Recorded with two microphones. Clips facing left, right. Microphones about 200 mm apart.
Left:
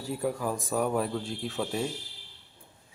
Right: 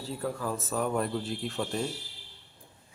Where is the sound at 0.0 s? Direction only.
15° left (ahead or behind).